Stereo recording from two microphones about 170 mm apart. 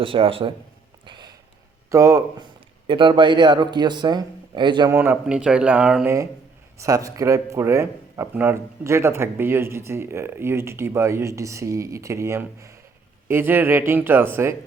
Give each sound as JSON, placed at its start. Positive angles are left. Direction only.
{"t": 0.0, "sound": "speech", "side_deg": -30}
{"t": 1.0, "sound": "a sound", "side_deg": -25}
{"t": 1.9, "sound": "a man's voice", "side_deg": -20}
{"t": 4.9, "sound": "speech", "side_deg": -10}
{"t": 6.7, "sound": "speech", "side_deg": -20}